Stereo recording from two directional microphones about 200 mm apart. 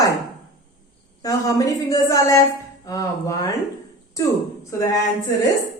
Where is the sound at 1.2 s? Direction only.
15° left (ahead or behind).